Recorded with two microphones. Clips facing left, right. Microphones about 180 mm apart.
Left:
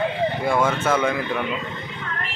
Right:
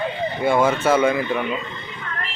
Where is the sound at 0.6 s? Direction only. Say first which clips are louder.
Right 4 dB; 10° right (ahead or behind).